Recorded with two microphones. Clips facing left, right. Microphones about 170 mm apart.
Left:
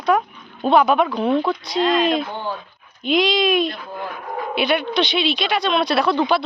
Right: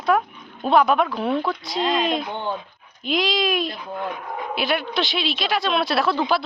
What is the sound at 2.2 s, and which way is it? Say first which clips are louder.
Speech: even; 20° right (ahead or behind).